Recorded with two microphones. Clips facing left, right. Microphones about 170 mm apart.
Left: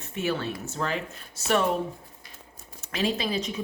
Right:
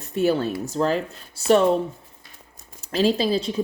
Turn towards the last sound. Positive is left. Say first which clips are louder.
# right 7 dB
turn(degrees=-30)  # may be behind; listen again after turning